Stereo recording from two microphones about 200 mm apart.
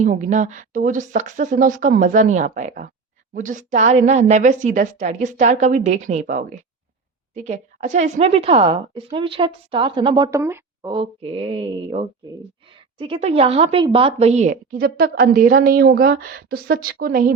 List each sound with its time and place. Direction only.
0.0 s a woman's voice: 40° right (ahead or behind)
10.3 s a woman's voice: 15° right (ahead or behind)
10.9 s a woman's voice: 30° right (ahead or behind); by 17.3 s 50° right (ahead or behind)